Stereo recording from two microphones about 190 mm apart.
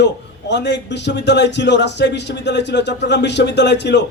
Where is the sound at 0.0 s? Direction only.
65° left (ahead or behind).